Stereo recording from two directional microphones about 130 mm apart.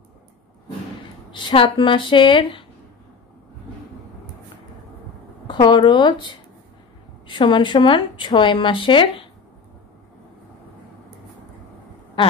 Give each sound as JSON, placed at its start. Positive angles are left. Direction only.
{"t": 1.3, "sound": "speech", "side_deg": 40}
{"t": 5.5, "sound": "speech", "side_deg": 35}